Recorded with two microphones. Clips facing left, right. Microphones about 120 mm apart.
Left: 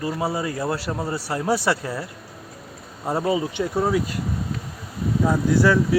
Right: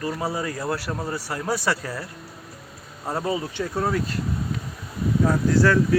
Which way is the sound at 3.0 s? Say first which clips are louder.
Left 4 dB; 15° left (ahead or behind).